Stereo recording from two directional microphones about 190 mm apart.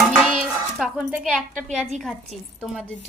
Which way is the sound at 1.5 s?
40° right (ahead or behind).